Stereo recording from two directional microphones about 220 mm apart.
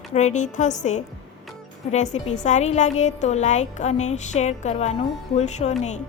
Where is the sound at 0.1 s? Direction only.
30° left (ahead or behind).